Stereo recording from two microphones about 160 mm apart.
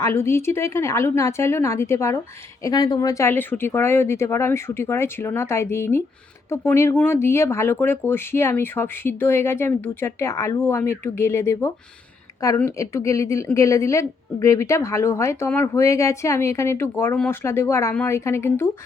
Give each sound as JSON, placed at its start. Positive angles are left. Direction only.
{"t": 0.0, "sound": "a woman's voice", "side_deg": 15}